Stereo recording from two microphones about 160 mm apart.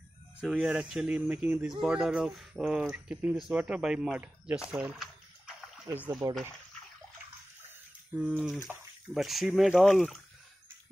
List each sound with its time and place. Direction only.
0.4 s speech: 5° right (ahead or behind)
6.2 s speech: 20° right (ahead or behind)
7.6 s bathtub: 10° right (ahead or behind)
8.6 s speech: centre (ahead or behind)